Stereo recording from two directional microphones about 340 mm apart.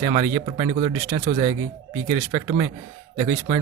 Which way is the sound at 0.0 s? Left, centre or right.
Centre.